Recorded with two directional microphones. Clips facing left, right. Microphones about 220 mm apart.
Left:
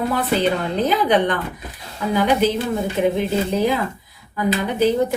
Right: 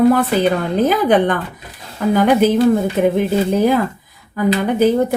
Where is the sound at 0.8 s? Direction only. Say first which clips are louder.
Right 4 dB; 50° right (ahead or behind).